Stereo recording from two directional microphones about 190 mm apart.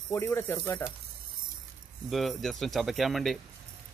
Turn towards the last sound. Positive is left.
turn(degrees=0)  # may be behind; listen again after turning